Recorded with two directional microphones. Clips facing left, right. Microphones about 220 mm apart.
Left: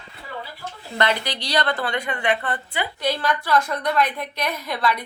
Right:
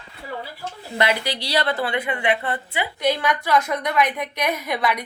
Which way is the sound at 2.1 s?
20° right (ahead or behind).